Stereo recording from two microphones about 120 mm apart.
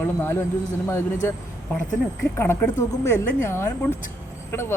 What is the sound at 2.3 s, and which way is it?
A man's voice, 20° left (ahead or behind).